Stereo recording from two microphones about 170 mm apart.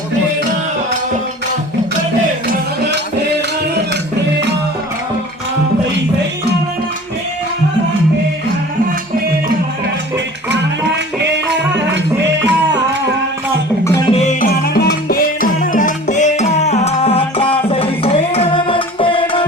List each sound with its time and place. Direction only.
14.1 s music: 40° left (ahead or behind)
14.4 s music: 70° left (ahead or behind); by 19.5 s 30° left (ahead or behind)